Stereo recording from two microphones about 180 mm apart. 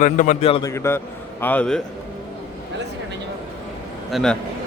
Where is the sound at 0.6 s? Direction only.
15° left (ahead or behind).